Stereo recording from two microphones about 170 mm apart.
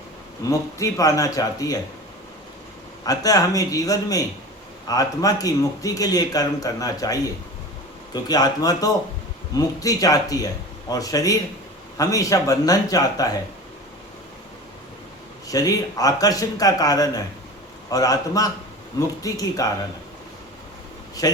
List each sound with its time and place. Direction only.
0.4 s a man's voice: 20° left (ahead or behind)
3.0 s a man's voice: 20° left (ahead or behind)
15.4 s a man's voice: 20° left (ahead or behind)